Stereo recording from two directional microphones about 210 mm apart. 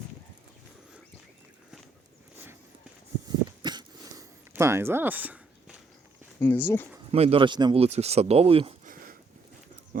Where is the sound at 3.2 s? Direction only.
20° right (ahead or behind).